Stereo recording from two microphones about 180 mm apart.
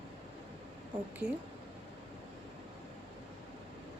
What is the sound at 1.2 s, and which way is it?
Speech, 40° right (ahead or behind).